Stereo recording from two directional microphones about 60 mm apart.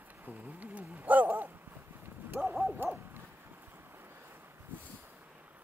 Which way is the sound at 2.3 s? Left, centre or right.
Right.